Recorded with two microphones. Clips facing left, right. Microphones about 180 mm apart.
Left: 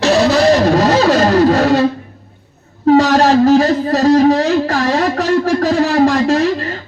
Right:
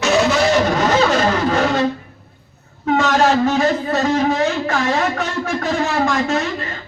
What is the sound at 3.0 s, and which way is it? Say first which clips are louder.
Music: left 1 dB; 35° left (ahead or behind).